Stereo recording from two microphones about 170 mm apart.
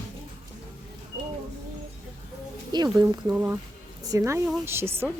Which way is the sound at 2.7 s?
25° right (ahead or behind).